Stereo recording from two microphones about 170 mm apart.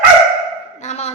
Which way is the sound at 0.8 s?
40° left (ahead or behind).